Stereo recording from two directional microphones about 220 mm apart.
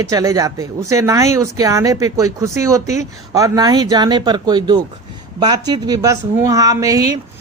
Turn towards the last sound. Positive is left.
turn(degrees=-15)  # may be behind; listen again after turning